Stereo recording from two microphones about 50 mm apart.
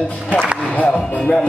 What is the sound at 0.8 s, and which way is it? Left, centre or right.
Speech, left.